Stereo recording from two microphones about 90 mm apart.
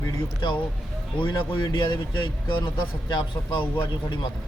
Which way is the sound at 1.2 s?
70° left (ahead or behind).